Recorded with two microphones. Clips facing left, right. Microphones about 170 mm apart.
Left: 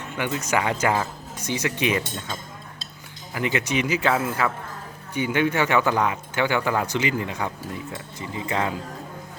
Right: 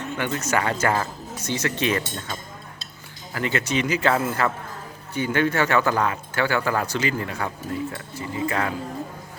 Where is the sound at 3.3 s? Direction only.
15° left (ahead or behind).